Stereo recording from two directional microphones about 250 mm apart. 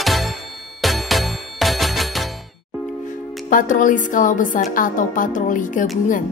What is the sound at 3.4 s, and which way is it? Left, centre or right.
A woman's voice, left.